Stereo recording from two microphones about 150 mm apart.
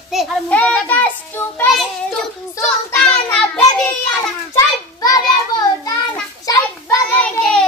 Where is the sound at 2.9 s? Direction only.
5° left (ahead or behind).